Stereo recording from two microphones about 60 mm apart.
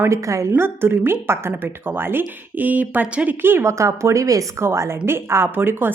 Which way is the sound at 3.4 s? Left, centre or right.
Right.